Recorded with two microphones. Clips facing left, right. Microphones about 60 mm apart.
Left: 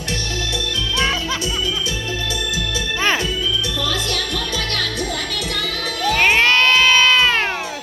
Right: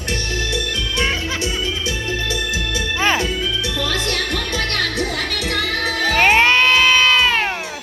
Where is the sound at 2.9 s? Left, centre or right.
Centre.